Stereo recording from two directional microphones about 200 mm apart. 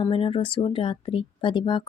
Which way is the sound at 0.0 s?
25° left (ahead or behind).